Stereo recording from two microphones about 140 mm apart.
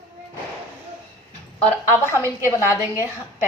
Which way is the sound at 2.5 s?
20° left (ahead or behind).